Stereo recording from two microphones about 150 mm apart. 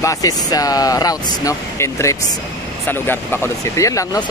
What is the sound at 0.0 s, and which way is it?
Speech, 20° left (ahead or behind).